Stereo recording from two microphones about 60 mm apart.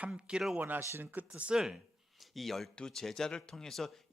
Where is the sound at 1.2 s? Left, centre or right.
Right.